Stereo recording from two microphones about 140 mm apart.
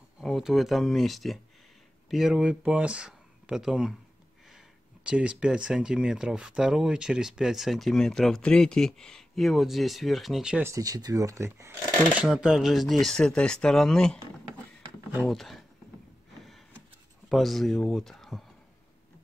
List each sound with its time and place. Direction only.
0.2 s speech: centre (ahead or behind)
5.0 s speech: 10° right (ahead or behind)
10.6 s speech: 25° right (ahead or behind)
12.2 s speech: 5° right (ahead or behind)
15.2 s speech: centre (ahead or behind)
17.3 s speech: centre (ahead or behind)